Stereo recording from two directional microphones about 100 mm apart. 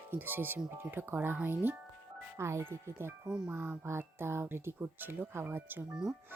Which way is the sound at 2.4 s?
25° right (ahead or behind).